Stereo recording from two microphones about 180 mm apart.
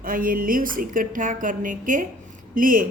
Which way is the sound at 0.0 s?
50° right (ahead or behind).